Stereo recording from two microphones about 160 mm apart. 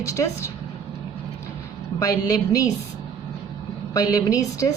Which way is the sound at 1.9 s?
20° left (ahead or behind).